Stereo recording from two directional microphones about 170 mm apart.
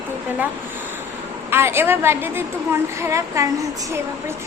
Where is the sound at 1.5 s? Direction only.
15° right (ahead or behind).